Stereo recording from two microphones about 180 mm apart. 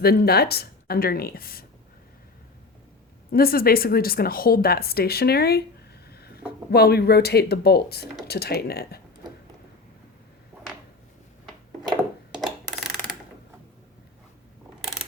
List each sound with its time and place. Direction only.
0.0 s speech: 60° left (ahead or behind)
3.3 s speech: 55° left (ahead or behind)
6.1 s a sound: 60° left (ahead or behind)
6.7 s speech: 60° left (ahead or behind)